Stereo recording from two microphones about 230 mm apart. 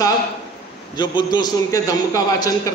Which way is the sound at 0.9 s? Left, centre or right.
Centre.